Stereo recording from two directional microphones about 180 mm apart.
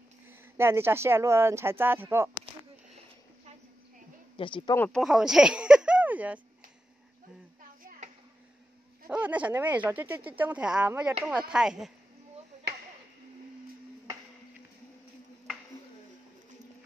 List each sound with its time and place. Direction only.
0.3 s speech: 15° right (ahead or behind)
4.4 s speech: 30° left (ahead or behind)
4.7 s speech: 10° left (ahead or behind)
5.0 s speech: 5° right (ahead or behind)
9.1 s speech: 10° right (ahead or behind)